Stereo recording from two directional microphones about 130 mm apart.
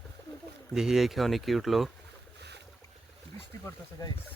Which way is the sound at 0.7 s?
5° right (ahead or behind).